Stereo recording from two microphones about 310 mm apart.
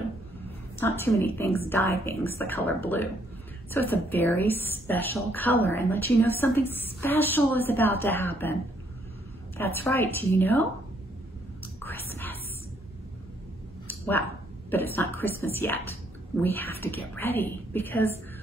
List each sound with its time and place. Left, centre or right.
0.7 s a woman's voice: centre
3.7 s a woman's voice: centre
9.6 s a woman's voice: centre
11.8 s whispering: centre
14.7 s a woman's voice: centre